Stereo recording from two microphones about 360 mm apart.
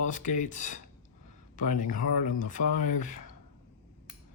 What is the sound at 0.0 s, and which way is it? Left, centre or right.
Speech, left.